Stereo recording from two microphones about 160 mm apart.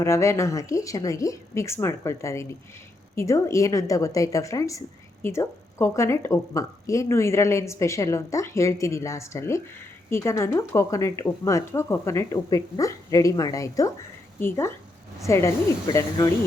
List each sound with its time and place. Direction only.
0.0 s a woman's voice: 15° left (ahead or behind)